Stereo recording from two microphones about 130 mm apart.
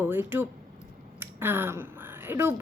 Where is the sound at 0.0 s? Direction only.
15° right (ahead or behind).